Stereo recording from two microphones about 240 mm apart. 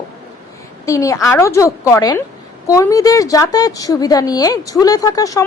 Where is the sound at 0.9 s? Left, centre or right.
Centre.